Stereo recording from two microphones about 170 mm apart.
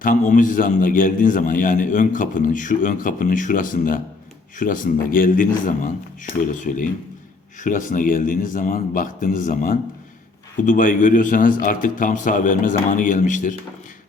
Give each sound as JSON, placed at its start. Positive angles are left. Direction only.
{"t": 0.0, "sound": "a man's voice", "side_deg": 50}